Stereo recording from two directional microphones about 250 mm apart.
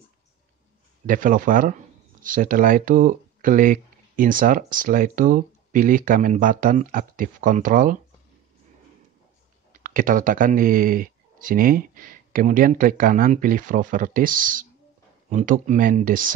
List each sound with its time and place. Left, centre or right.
1.0 s speech: right
9.7 s speech: right